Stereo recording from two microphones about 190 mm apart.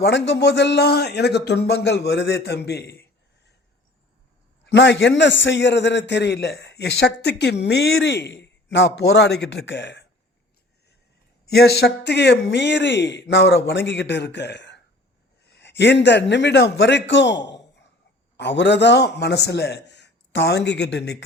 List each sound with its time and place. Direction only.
0.0 s a man's voice: 65° left (ahead or behind)
4.6 s a man's voice: 65° left (ahead or behind)
11.4 s a man's voice: 60° left (ahead or behind)